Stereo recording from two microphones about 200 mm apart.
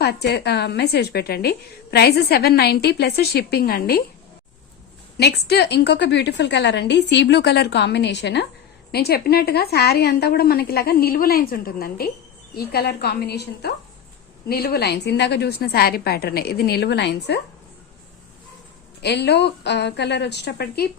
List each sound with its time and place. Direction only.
0.0 s a woman's voice: 55° left (ahead or behind)
5.1 s a woman's voice: 55° left (ahead or behind)
19.0 s a woman's voice: 55° left (ahead or behind)